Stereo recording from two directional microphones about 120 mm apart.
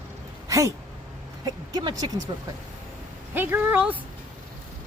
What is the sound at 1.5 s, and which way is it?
Speech, 35° right (ahead or behind).